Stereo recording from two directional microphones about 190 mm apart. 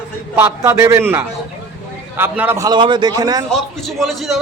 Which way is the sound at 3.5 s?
Centre (ahead or behind).